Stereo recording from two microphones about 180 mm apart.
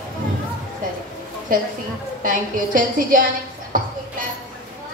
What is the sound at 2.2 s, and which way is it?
A woman's voice, 50° right (ahead or behind).